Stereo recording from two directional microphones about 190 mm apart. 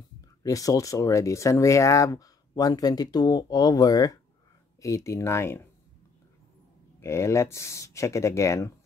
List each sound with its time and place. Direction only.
0.4 s speech: 20° left (ahead or behind)
7.0 s speech: 15° left (ahead or behind)